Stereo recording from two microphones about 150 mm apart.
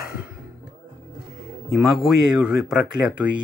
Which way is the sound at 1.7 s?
Centre (ahead or behind).